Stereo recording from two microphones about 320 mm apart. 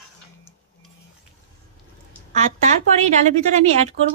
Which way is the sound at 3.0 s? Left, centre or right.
Right.